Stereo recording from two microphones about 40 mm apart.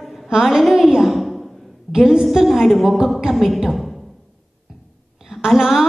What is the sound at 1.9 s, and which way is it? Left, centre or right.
Music, centre.